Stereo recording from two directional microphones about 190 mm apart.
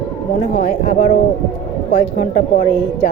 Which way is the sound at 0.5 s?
40° left (ahead or behind).